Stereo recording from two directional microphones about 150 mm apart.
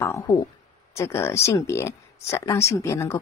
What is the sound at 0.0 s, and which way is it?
Speech, 20° left (ahead or behind).